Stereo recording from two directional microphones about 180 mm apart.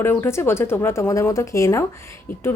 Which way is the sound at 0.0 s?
15° left (ahead or behind).